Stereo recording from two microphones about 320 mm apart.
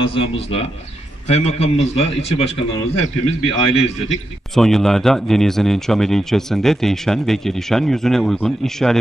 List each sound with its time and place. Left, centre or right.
0.0 s a man's voice: centre
4.6 s speech: centre